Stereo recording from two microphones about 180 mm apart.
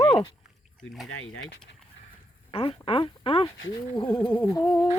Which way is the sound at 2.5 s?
30° left (ahead or behind).